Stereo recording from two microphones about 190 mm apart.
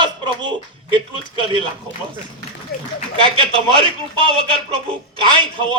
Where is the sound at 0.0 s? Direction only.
25° right (ahead or behind).